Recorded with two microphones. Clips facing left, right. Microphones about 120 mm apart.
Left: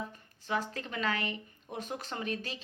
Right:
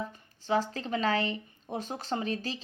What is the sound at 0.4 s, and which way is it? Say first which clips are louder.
A woman's voice: right 6 dB; 30° right (ahead or behind).